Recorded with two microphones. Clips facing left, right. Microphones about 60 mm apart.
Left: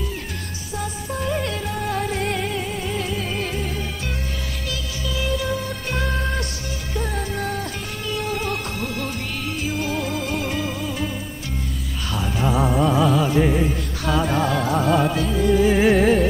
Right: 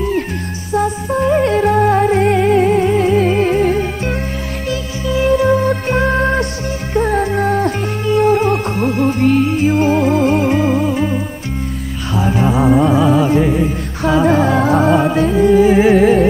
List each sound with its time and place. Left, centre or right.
0.7 s music: right
12.4 s music: centre
13.4 s music: centre
14.3 s music: right
15.5 s music: centre